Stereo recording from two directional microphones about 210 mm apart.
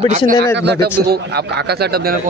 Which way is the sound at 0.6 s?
55° right (ahead or behind).